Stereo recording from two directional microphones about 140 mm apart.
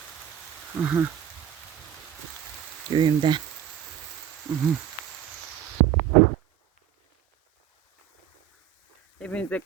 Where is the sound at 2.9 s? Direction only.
35° right (ahead or behind).